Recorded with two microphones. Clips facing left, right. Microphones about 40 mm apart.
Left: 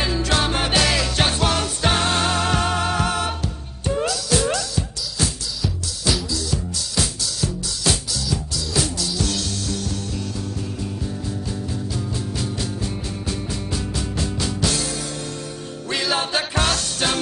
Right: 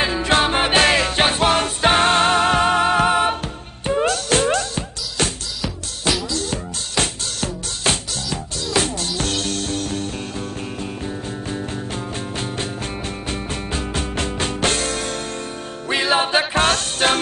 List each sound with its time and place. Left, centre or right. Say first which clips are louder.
0.0 s music: right 4 dB; right
0.7 s music: right 4 dB; right
4.0 s music: right 4 dB; right
6.3 s music: right 1 dB; right
11.9 s music: right 1 dB; right
15.9 s music: right 5 dB; right
16.5 s music: right 4 dB; right